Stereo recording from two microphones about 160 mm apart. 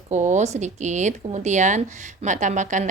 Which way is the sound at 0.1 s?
45° right (ahead or behind).